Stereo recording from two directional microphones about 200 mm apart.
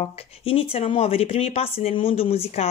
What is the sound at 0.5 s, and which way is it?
Speech, 30° left (ahead or behind).